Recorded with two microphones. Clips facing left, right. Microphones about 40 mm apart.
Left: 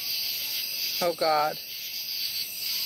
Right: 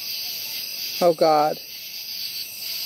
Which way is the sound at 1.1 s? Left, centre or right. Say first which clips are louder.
Right 4 dB; left.